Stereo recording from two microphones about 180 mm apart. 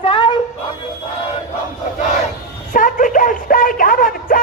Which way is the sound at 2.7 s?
45° left (ahead or behind).